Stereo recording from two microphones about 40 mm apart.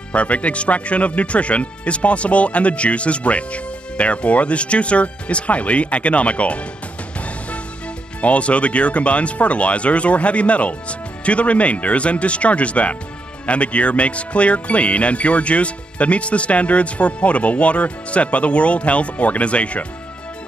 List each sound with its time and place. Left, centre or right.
0.1 s speech: left
8.2 s speech: left